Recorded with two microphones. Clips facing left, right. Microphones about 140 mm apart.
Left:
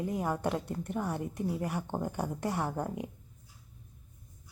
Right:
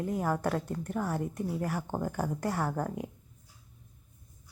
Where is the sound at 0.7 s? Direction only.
15° left (ahead or behind).